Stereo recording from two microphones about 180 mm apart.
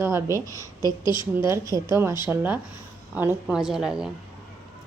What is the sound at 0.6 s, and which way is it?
Speech, 20° left (ahead or behind).